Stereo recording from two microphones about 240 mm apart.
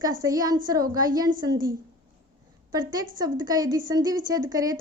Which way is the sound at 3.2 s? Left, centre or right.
Centre.